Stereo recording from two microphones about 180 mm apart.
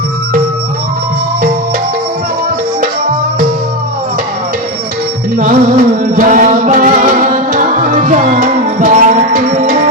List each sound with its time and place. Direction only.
5.4 s music: 45° right (ahead or behind)